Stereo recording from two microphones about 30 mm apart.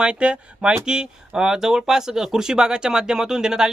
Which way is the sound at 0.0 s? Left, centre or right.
Right.